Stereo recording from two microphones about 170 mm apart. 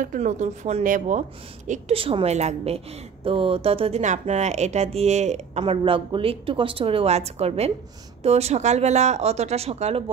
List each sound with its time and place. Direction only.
0.0 s speech: 50° right (ahead or behind)
1.7 s a woman's voice: 35° right (ahead or behind)
5.6 s a woman's voice: 30° right (ahead or behind)